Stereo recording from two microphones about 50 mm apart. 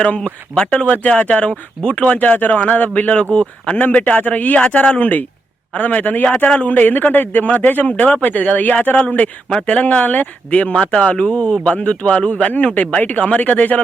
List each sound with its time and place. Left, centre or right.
0.6 s speech: left
2.1 s a man's voice: left
10.8 s speech: centre